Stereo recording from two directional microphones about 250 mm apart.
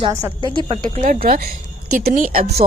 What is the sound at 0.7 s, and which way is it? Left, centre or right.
A woman's voice, right.